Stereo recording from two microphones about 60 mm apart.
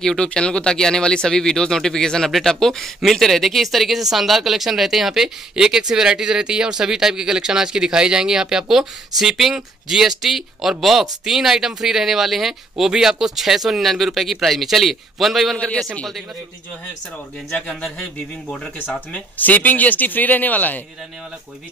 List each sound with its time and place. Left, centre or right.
0.0 s speech: centre
15.5 s speech: centre
17.5 s speech: centre
19.1 s speech: left